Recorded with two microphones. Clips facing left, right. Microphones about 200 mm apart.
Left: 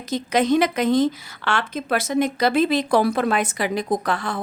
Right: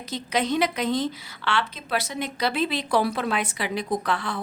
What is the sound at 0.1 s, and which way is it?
Speech, 45° left (ahead or behind).